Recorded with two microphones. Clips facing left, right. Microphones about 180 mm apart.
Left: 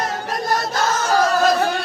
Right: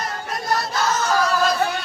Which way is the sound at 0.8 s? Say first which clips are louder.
Left 3 dB; 45° left (ahead or behind).